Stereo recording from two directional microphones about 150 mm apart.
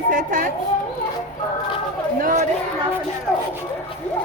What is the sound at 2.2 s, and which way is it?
Speech, 65° right (ahead or behind).